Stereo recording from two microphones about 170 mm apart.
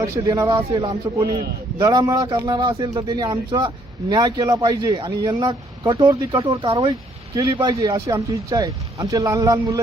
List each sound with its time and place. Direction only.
0.0 s speech: 20° right (ahead or behind)